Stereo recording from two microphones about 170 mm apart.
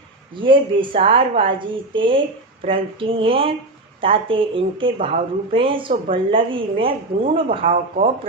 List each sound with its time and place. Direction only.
0.4 s a woman's voice: 30° right (ahead or behind)
7.6 s a woman's voice: 45° right (ahead or behind)